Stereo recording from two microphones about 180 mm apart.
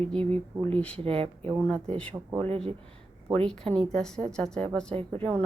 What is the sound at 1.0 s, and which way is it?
Speech, 35° right (ahead or behind).